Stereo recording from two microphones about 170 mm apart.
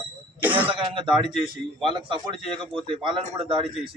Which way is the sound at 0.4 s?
10° right (ahead or behind).